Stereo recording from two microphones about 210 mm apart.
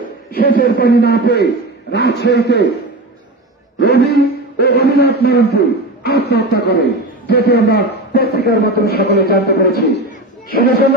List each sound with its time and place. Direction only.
0.3 s a man's voice: 45° left (ahead or behind)
3.8 s a man's voice: 50° left (ahead or behind)